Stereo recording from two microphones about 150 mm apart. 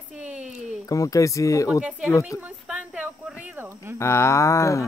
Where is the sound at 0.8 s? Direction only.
20° left (ahead or behind).